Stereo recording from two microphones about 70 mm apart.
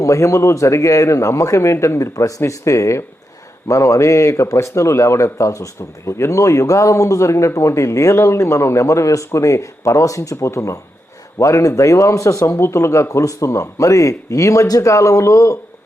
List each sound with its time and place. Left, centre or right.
0.0 s speech: left